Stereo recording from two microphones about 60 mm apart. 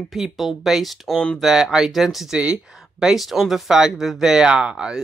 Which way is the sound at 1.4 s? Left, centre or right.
Centre.